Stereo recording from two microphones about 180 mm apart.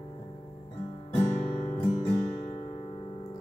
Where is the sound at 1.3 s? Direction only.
30° left (ahead or behind).